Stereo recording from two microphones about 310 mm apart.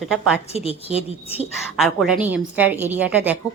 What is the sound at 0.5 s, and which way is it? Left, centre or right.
Speech, centre.